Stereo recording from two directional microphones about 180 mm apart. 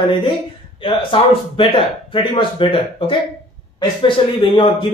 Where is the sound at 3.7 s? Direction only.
25° left (ahead or behind).